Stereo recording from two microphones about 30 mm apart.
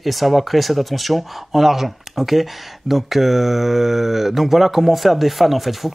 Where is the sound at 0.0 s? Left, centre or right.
Centre.